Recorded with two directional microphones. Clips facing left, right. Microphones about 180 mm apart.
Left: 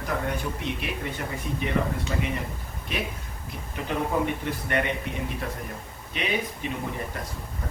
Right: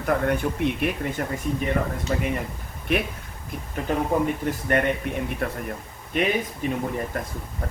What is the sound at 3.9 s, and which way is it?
Speech, 45° right (ahead or behind).